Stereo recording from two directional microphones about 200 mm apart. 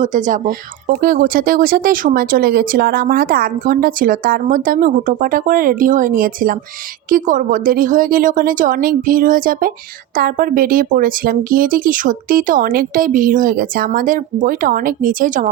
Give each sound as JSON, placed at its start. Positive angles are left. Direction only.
{"t": 0.0, "sound": "speech", "side_deg": -40}